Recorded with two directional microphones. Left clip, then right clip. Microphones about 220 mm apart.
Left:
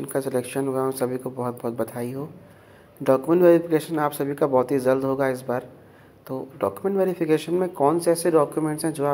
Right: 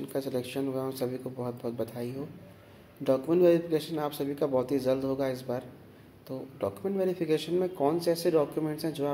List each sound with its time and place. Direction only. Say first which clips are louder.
0.0 s speech: left 7 dB; 15° left (ahead or behind)